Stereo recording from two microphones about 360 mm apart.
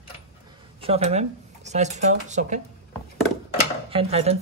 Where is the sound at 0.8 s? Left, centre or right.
Centre.